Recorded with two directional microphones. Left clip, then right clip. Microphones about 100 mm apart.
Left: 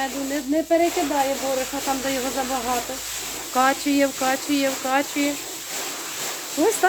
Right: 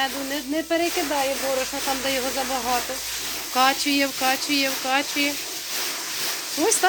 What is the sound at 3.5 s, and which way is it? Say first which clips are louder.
Speech: even; 10° left (ahead or behind).